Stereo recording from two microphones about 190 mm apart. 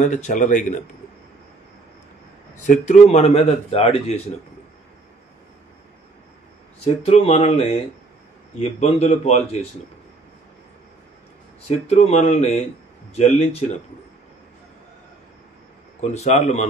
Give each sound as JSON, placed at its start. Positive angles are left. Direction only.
{"t": 0.0, "sound": "a man's voice", "side_deg": 40}
{"t": 2.6, "sound": "a man's voice", "side_deg": 40}
{"t": 6.8, "sound": "a man's voice", "side_deg": 35}
{"t": 11.6, "sound": "a man's voice", "side_deg": 35}
{"t": 16.0, "sound": "a man's voice", "side_deg": 35}